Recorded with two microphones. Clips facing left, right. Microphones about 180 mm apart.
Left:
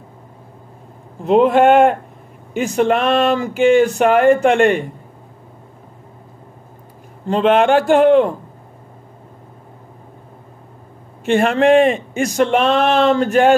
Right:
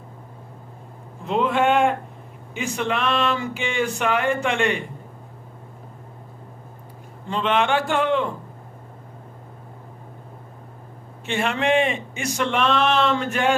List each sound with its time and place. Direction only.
1.2 s a man's voice: 45° left (ahead or behind)
2.5 s a man's voice: 45° left (ahead or behind)
7.2 s a man's voice: 45° left (ahead or behind)
11.2 s a man's voice: 45° left (ahead or behind)